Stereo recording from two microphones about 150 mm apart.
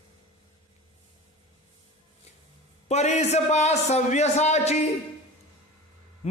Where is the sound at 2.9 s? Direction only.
50° left (ahead or behind).